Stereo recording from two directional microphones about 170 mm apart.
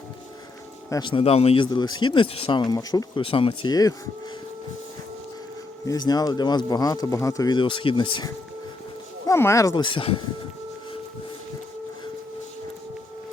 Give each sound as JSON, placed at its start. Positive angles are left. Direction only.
{"t": 0.9, "sound": "speech", "side_deg": 25}
{"t": 5.8, "sound": "speech", "side_deg": 20}
{"t": 9.2, "sound": "speech", "side_deg": 15}